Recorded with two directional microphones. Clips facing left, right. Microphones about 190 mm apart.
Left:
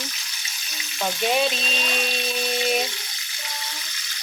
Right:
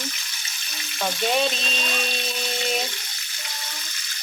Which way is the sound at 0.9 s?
Centre (ahead or behind).